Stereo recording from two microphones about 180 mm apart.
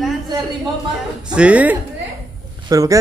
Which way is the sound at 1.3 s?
5° right (ahead or behind).